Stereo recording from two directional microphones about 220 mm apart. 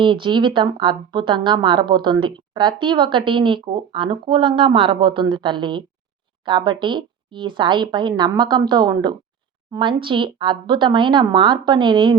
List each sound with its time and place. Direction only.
0.0 s speech: 20° right (ahead or behind)